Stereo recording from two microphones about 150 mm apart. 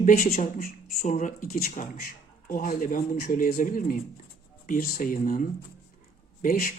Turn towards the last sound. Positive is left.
turn(degrees=75)  # may be behind; listen again after turning